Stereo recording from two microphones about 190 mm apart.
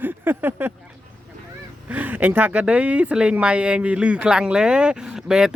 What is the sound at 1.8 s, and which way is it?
Speech, 10° right (ahead or behind).